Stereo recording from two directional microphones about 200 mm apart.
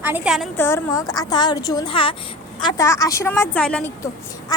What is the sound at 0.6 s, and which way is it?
A woman's voice, 15° left (ahead or behind).